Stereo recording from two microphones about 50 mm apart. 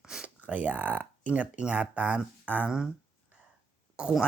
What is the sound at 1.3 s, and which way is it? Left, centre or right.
Speech, right.